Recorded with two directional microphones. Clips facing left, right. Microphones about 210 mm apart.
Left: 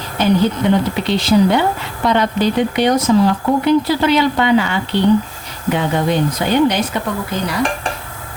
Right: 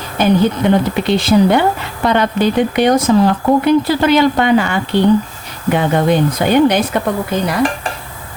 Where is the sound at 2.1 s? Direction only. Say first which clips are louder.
Right 2 dB; 55° right (ahead or behind).